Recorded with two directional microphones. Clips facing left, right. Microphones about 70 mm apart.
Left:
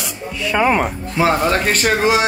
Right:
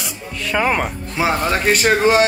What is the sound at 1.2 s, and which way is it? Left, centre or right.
Speech, centre.